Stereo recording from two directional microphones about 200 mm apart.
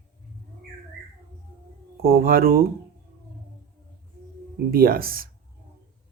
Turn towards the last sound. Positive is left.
turn(degrees=-45)  # may be behind; listen again after turning